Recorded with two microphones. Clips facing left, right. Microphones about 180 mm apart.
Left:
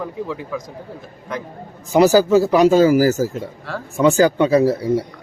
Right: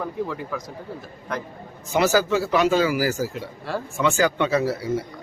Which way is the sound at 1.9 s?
35° left (ahead or behind).